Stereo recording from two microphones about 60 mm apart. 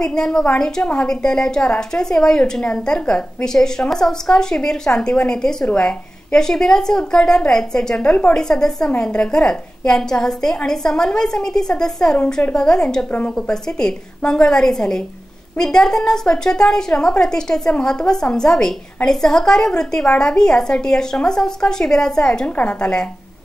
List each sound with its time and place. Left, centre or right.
0.0 s a woman's voice: centre